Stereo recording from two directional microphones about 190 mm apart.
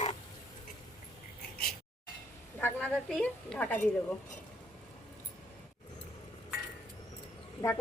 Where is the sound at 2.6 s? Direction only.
5° left (ahead or behind).